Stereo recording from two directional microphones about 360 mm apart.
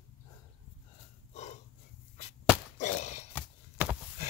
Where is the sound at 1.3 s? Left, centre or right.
Centre.